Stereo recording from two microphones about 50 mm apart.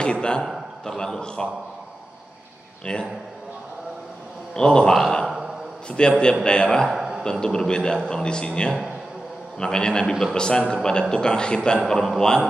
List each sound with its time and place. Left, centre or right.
0.0 s a man's voice: centre
0.4 s a sound: centre
0.9 s a man's voice: centre
2.8 s a man's voice: centre
4.6 s a man's voice: centre
5.9 s a man's voice: centre
6.9 s a sound: centre
7.2 s a man's voice: centre